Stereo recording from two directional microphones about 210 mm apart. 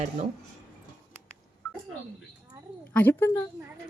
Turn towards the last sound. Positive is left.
turn(degrees=10)  # may be behind; listen again after turning